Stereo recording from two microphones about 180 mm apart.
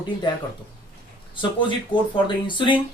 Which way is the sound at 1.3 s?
25° left (ahead or behind).